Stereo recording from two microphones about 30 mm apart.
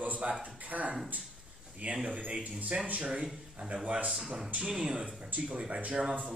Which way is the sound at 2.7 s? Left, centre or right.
Right.